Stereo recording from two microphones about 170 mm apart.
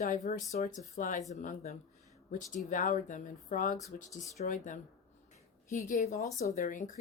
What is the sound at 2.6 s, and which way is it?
Speech, 50° left (ahead or behind).